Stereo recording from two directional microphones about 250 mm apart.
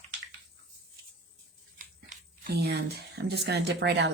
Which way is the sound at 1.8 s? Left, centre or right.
Right.